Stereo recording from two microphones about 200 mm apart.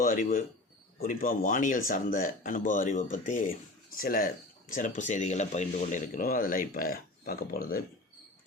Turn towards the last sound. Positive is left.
turn(degrees=50)  # may be behind; listen again after turning